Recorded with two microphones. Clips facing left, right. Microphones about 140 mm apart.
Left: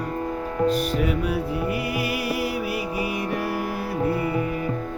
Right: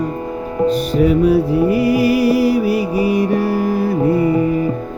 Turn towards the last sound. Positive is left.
turn(degrees=-40)  # may be behind; listen again after turning